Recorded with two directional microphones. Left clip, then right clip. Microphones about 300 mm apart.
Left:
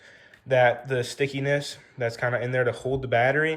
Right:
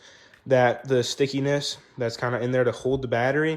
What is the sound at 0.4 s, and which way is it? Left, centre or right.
Speech, centre.